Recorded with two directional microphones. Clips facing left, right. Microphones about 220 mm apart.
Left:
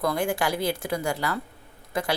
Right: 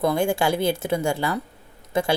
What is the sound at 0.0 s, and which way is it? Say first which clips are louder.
A woman's voice: right 4 dB; 25° right (ahead or behind).